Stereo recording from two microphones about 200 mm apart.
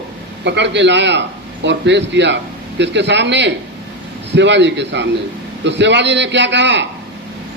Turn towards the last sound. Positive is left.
turn(degrees=-60)  # may be behind; listen again after turning